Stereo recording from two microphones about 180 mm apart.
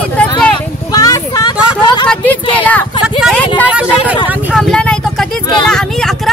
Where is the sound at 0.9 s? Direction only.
20° left (ahead or behind).